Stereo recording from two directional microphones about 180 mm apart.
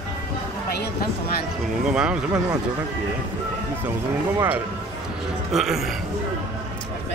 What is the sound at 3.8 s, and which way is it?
Speech, 10° right (ahead or behind).